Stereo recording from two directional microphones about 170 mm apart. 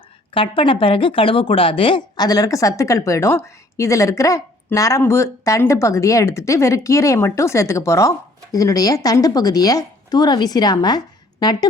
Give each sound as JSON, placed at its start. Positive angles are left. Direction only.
{"t": 0.3, "sound": "a woman's voice", "side_deg": 30}